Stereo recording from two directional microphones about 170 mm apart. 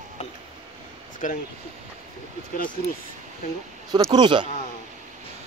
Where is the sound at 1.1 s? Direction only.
50° left (ahead or behind).